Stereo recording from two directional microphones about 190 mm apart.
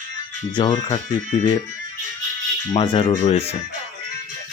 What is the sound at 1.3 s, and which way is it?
Speech, 35° left (ahead or behind).